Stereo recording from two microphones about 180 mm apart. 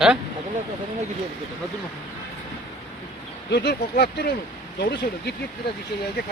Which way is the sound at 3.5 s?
65° left (ahead or behind).